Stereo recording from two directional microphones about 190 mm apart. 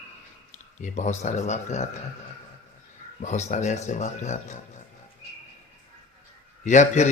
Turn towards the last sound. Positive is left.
turn(degrees=40)  # may be behind; listen again after turning